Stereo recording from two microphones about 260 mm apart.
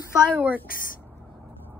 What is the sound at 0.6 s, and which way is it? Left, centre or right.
Speech, left.